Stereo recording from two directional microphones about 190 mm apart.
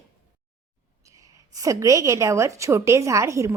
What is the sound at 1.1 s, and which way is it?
Speech, 15° right (ahead or behind).